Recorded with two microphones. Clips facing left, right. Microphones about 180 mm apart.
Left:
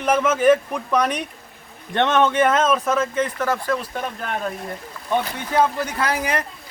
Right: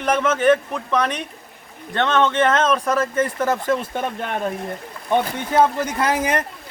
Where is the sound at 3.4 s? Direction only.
20° right (ahead or behind).